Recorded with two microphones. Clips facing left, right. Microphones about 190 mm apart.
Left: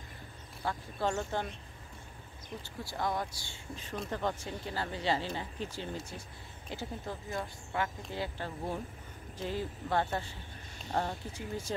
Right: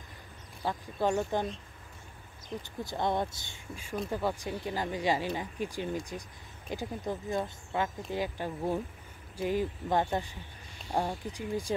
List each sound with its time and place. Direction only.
0.7 s speech: 15° right (ahead or behind)
2.8 s speech: 20° right (ahead or behind)
3.7 s speech: 5° right (ahead or behind)